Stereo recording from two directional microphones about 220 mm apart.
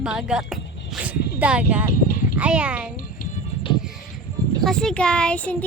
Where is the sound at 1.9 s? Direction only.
40° left (ahead or behind).